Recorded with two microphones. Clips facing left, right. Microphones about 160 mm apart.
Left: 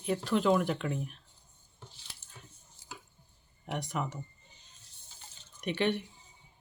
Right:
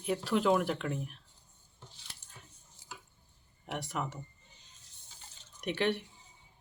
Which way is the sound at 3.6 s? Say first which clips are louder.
Left 2 dB; centre (ahead or behind).